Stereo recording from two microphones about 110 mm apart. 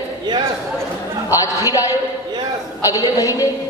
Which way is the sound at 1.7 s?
30° left (ahead or behind).